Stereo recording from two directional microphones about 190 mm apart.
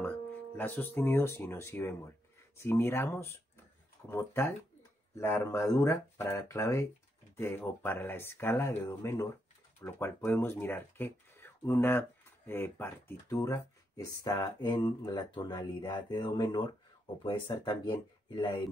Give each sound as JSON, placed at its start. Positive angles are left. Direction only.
{"t": 0.0, "sound": "speech", "side_deg": 10}